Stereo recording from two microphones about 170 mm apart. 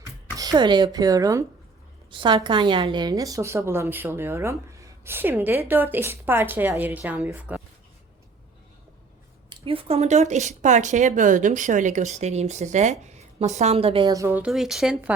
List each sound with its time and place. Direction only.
0.0 s a woman's voice: 20° right (ahead or behind); by 7.6 s 5° right (ahead or behind)
9.5 s speech: 30° right (ahead or behind)
14.1 s a woman's voice: 15° right (ahead or behind)
14.4 s speech: centre (ahead or behind)